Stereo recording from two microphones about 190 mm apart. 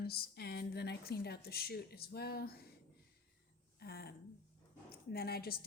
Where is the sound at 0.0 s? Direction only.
55° left (ahead or behind).